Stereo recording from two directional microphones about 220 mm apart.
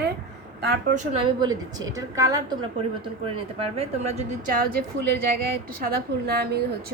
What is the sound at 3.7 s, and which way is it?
Speech, 30° right (ahead or behind).